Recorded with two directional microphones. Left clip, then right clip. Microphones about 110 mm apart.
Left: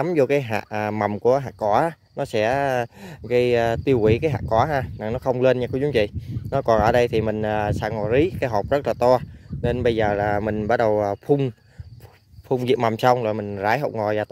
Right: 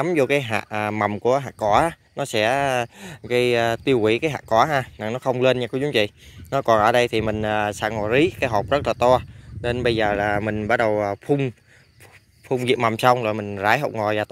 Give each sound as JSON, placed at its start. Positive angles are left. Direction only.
{"t": 0.0, "sound": "speech", "side_deg": 40}